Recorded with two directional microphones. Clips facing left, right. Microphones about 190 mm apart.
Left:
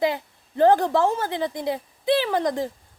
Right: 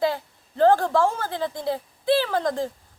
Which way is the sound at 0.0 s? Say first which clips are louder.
Left 1 dB; 15° left (ahead or behind).